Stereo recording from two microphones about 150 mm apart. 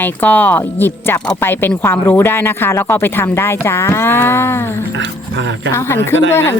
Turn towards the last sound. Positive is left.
turn(degrees=15)  # may be behind; listen again after turning